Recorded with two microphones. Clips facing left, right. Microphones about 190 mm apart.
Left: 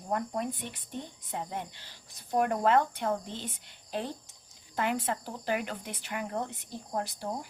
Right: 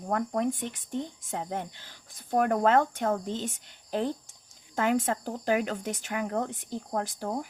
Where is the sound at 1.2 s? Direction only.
45° right (ahead or behind).